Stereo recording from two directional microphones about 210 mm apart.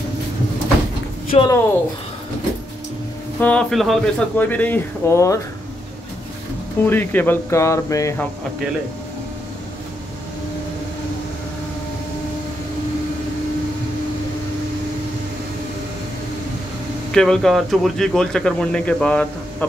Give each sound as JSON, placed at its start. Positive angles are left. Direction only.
{"t": 1.3, "sound": "a woman's voice", "side_deg": 20}
{"t": 3.3, "sound": "speech", "side_deg": 5}
{"t": 6.8, "sound": "speech", "side_deg": 10}
{"t": 17.1, "sound": "speech", "side_deg": 5}